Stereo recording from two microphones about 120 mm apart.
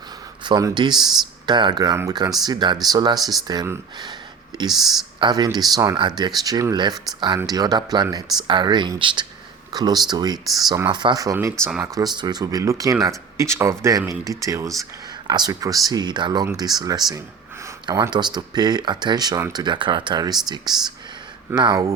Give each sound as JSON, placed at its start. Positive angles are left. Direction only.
{"t": 0.4, "sound": "speech", "side_deg": -35}
{"t": 3.2, "sound": "speech", "side_deg": 0}
{"t": 3.4, "sound": "speech", "side_deg": -35}
{"t": 4.7, "sound": "speech", "side_deg": 0}
{"t": 5.2, "sound": "speech", "side_deg": -35}
{"t": 10.4, "sound": "speech", "side_deg": 0}
{"t": 10.8, "sound": "speech", "side_deg": -40}